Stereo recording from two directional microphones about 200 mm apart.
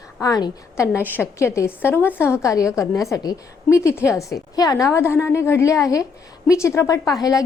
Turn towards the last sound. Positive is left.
turn(degrees=20)  # may be behind; listen again after turning